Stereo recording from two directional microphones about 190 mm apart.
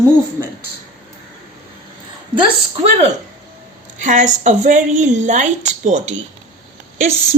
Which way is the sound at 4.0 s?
40° right (ahead or behind).